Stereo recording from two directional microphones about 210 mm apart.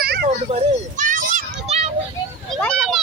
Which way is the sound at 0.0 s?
45° right (ahead or behind).